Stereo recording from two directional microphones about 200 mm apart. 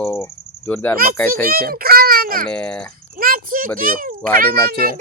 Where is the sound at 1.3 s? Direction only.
45° right (ahead or behind).